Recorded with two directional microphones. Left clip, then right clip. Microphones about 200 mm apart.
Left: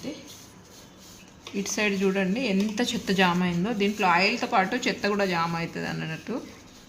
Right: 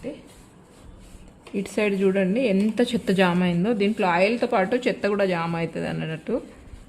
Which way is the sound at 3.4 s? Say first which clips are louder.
Right 4 dB; 55° right (ahead or behind).